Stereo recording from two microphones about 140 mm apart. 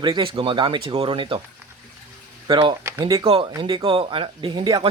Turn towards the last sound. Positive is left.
turn(degrees=-35)  # may be behind; listen again after turning